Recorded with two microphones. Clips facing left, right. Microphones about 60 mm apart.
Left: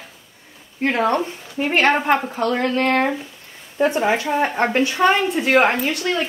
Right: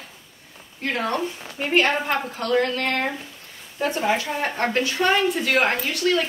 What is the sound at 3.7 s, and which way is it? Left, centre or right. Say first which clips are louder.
Speech: left 4 dB; left.